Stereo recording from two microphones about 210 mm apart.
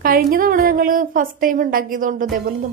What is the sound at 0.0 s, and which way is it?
A woman's voice, 45° right (ahead or behind).